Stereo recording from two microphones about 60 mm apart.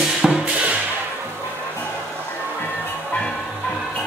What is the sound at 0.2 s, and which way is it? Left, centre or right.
Music, centre.